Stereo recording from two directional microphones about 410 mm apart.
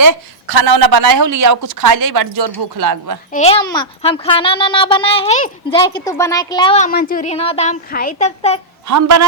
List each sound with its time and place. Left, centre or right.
0.0 s a woman's voice: right
3.3 s a child's voice: centre
8.9 s a woman's voice: right